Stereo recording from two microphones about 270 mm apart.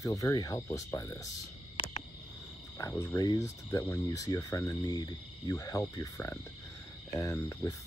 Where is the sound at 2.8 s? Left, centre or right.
Centre.